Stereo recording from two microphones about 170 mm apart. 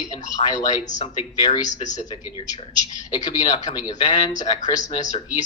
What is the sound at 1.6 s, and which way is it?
Speech, 45° left (ahead or behind).